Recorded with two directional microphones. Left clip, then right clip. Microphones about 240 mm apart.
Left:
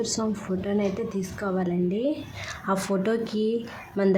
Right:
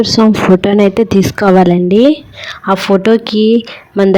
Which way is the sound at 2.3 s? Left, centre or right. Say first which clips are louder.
Right 14 dB; right.